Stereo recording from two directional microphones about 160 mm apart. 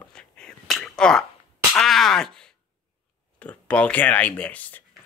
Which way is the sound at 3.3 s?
10° left (ahead or behind).